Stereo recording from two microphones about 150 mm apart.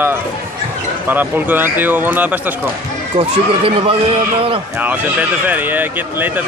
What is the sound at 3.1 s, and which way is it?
Speech, 40° right (ahead or behind).